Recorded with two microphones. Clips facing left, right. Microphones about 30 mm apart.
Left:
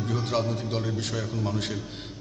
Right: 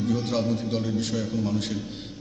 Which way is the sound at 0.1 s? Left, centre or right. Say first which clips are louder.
Even; left.